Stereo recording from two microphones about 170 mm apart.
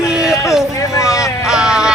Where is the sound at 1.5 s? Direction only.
5° right (ahead or behind).